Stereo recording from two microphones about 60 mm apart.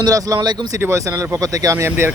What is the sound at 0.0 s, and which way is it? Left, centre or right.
Speech, right.